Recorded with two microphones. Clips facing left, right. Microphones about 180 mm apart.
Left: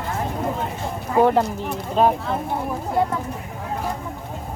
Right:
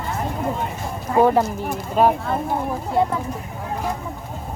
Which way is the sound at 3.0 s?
25° right (ahead or behind).